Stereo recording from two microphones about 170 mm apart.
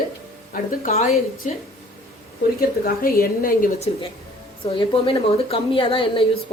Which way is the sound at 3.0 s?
60° left (ahead or behind).